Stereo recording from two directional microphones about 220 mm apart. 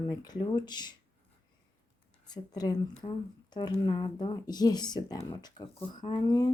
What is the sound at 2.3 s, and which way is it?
Speech, 15° left (ahead or behind).